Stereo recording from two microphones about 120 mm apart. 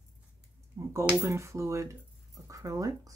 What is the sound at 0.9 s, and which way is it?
Speech, 20° right (ahead or behind).